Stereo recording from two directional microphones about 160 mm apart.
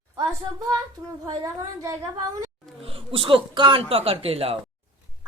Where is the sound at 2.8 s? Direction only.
35° right (ahead or behind).